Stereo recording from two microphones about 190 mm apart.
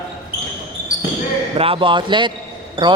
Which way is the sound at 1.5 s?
30° right (ahead or behind).